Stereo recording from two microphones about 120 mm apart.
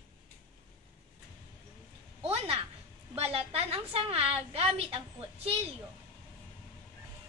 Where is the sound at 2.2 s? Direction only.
50° right (ahead or behind).